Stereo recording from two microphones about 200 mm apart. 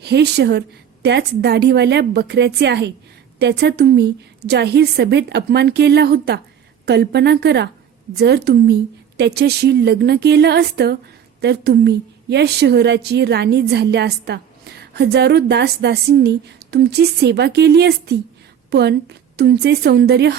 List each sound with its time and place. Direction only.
0.0 s a woman's voice: 55° right (ahead or behind)